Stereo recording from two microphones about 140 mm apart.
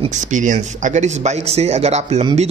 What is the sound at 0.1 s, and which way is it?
A man's voice, 65° right (ahead or behind).